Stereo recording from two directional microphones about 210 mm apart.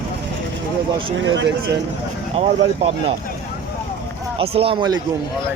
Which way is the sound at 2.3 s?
30° right (ahead or behind).